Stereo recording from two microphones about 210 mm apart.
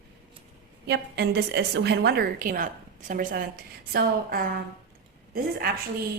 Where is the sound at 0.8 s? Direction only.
55° right (ahead or behind).